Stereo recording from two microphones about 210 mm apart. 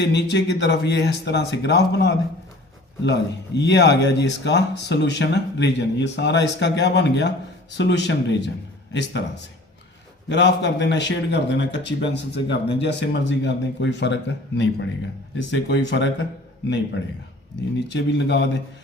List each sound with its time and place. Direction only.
0.0 s speech: 55° left (ahead or behind)
17.7 s speech: 55° left (ahead or behind)